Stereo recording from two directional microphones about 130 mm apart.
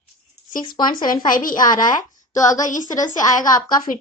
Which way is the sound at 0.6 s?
35° left (ahead or behind).